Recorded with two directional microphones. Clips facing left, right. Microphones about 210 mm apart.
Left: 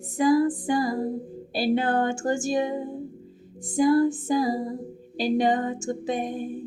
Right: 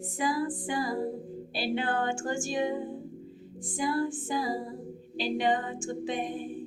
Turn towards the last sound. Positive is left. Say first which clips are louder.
# left 4 dB
turn(degrees=40)  # may be behind; listen again after turning